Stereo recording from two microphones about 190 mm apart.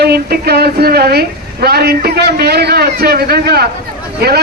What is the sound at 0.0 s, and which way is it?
A man's voice, 60° right (ahead or behind).